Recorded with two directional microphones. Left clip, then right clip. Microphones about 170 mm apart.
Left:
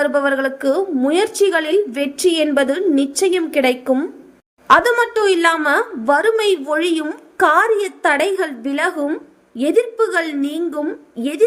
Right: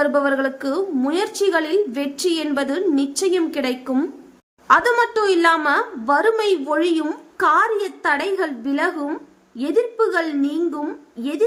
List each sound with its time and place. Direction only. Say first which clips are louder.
0.0 s a woman's voice: left 2 dB; 20° left (ahead or behind)